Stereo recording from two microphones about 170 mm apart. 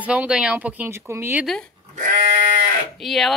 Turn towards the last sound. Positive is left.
turn(degrees=0)  # may be behind; listen again after turning